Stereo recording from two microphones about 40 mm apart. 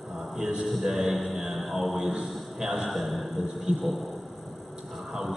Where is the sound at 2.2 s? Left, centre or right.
Centre.